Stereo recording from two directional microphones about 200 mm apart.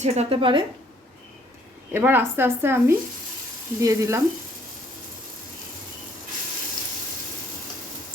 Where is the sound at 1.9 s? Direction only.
10° right (ahead or behind).